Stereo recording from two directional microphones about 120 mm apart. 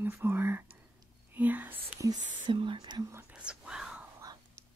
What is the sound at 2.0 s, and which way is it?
Speech, 35° right (ahead or behind).